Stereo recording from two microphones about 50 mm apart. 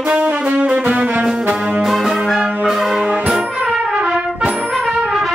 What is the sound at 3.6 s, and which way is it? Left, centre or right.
Brass instrument, centre.